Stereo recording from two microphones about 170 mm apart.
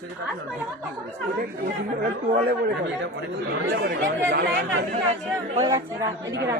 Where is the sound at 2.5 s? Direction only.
80° right.